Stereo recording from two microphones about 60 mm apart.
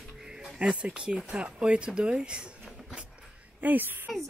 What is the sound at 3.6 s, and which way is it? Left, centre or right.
Speech, right.